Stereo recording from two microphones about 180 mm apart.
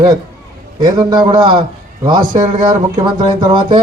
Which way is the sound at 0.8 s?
25° right (ahead or behind).